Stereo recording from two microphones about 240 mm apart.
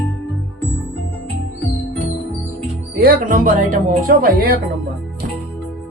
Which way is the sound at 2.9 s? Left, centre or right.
Right.